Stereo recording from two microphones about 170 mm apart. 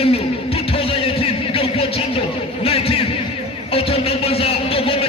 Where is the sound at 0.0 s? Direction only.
35° left (ahead or behind).